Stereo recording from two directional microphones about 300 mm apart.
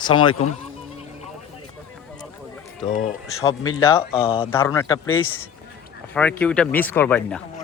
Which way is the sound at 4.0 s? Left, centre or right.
Centre.